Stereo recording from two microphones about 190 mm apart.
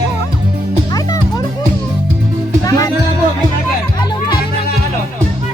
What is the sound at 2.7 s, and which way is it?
Music, 20° left (ahead or behind).